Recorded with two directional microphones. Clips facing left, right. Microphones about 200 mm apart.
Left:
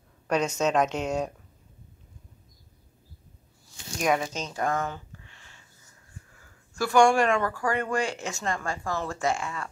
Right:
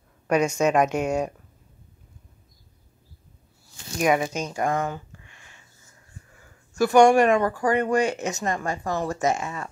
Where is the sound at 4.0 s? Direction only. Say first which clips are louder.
Right 4 dB; 10° right (ahead or behind).